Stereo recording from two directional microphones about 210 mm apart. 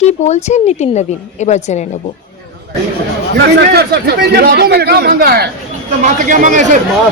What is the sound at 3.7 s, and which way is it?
A man's voice, 50° right (ahead or behind).